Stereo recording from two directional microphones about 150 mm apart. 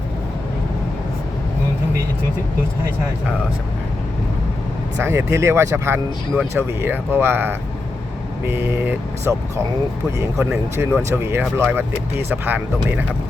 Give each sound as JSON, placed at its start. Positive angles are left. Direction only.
{"t": 5.0, "sound": "speech", "side_deg": -20}